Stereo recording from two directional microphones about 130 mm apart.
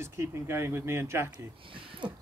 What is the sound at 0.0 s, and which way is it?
Speech, 20° right (ahead or behind).